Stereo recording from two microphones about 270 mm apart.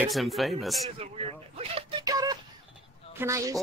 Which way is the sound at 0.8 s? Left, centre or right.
Right.